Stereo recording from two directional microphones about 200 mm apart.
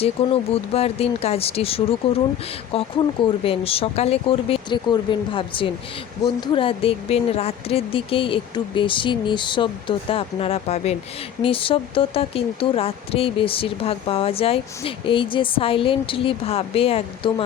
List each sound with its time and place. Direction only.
0.2 s speech: 30° left (ahead or behind)